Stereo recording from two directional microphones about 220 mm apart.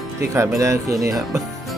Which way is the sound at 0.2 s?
15° right (ahead or behind).